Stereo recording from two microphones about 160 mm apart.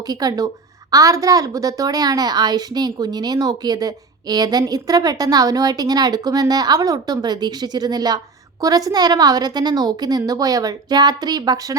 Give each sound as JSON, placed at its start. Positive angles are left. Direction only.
{"t": 0.0, "sound": "a woman's voice", "side_deg": -25}